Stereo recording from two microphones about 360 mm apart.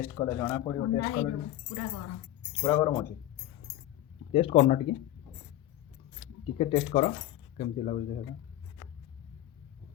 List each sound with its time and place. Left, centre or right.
0.2 s speech: centre
0.8 s a man's voice: left
2.6 s speech: centre
4.3 s speech: centre
6.1 s speech: centre
7.5 s coin: centre